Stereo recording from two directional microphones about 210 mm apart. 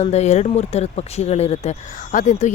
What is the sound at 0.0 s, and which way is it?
Speech, 30° left (ahead or behind).